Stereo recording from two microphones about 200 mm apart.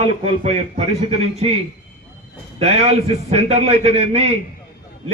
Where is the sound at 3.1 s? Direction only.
30° right (ahead or behind).